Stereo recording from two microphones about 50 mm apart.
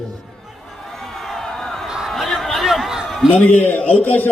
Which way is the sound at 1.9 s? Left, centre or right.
Centre.